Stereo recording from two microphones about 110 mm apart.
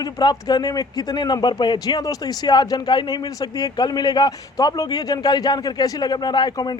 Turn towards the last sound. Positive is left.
turn(degrees=40)  # may be behind; listen again after turning